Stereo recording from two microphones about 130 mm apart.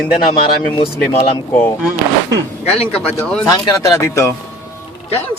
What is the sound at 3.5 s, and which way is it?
Speech, 25° left (ahead or behind).